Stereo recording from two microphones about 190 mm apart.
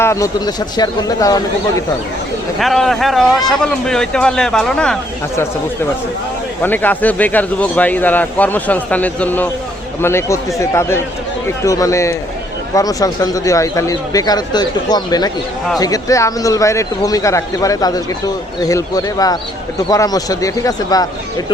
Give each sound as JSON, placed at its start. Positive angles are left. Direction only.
{"t": 0.0, "sound": "speech", "side_deg": 15}
{"t": 2.6, "sound": "a man's voice", "side_deg": 0}
{"t": 6.6, "sound": "speech", "side_deg": 10}